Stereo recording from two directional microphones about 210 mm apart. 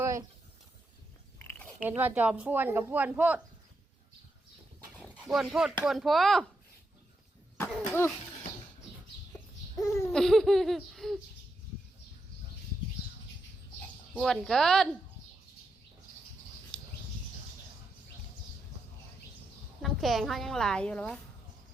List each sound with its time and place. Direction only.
0.0 s a sound: 15° right (ahead or behind)
1.4 s chewing: 10° left (ahead or behind)
1.8 s speech: 10° right (ahead or behind)
5.2 s a woman's voice: centre (ahead or behind)
9.7 s laughter: 15° left (ahead or behind)
10.1 s a woman's voice: centre (ahead or behind)
14.1 s a woman's voice: centre (ahead or behind)
19.8 s a woman's voice: centre (ahead or behind)